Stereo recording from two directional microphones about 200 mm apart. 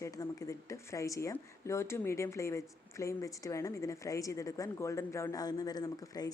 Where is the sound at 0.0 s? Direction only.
15° left (ahead or behind).